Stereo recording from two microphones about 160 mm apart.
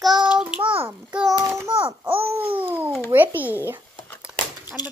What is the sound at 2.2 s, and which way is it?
Babbling, 10° right (ahead or behind).